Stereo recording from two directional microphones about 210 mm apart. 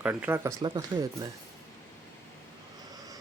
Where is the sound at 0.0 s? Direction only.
10° right (ahead or behind).